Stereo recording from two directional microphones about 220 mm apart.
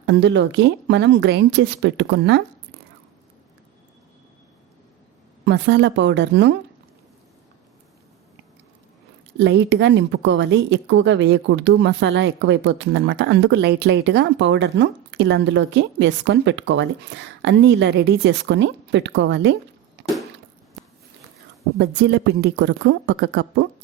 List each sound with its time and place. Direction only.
0.0 s speech: 55° right (ahead or behind)
5.5 s speech: 50° right (ahead or behind)
9.4 s speech: 50° right (ahead or behind)
21.8 s speech: 50° right (ahead or behind)